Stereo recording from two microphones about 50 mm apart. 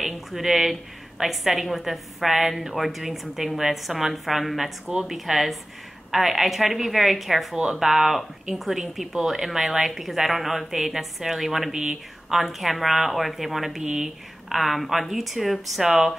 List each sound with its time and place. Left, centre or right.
0.0 s a woman's voice: centre
11.8 s speech: centre
12.4 s a woman's voice: centre